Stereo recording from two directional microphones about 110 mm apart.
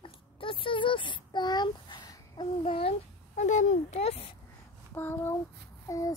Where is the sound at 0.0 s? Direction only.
50° left (ahead or behind).